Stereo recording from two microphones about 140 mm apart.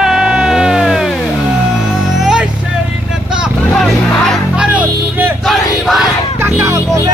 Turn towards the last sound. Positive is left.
turn(degrees=-20)  # may be behind; listen again after turning